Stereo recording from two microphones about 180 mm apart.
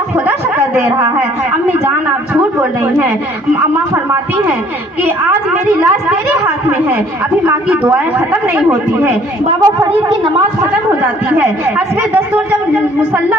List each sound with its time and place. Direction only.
0.3 s a sound: 10° right (ahead or behind)
2.3 s a woman's voice: 10° right (ahead or behind)
7.4 s a woman's voice: 10° right (ahead or behind)
9.6 s a woman's voice: 20° right (ahead or behind)
11.3 s a woman's voice: 10° right (ahead or behind)